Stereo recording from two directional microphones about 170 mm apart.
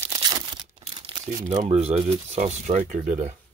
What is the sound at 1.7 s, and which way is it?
Speech, 40° right (ahead or behind).